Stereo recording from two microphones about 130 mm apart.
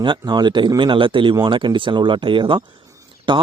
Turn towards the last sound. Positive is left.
turn(degrees=-40)  # may be behind; listen again after turning